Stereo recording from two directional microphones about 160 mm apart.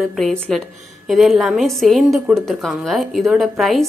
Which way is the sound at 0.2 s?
5° left (ahead or behind).